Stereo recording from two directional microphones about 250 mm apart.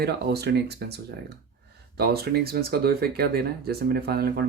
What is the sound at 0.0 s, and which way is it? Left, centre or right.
Speech, right.